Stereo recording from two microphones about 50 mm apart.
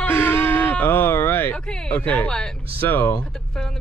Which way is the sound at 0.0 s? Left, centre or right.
Left.